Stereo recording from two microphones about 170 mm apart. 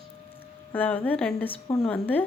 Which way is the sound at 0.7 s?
10° left (ahead or behind).